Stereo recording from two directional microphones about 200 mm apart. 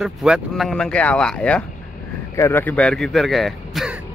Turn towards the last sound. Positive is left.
turn(degrees=0)  # may be behind; listen again after turning